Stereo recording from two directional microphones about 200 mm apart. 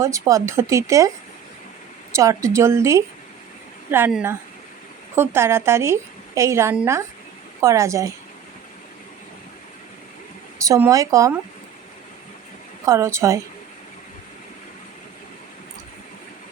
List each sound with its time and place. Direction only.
0.0 s a woman's voice: 15° right (ahead or behind)
2.1 s a woman's voice: 15° right (ahead or behind)
10.7 s a woman's voice: 15° right (ahead or behind)
12.8 s a woman's voice: 15° right (ahead or behind)